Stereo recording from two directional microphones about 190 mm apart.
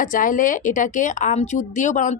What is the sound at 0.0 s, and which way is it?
Speech, 45° left (ahead or behind).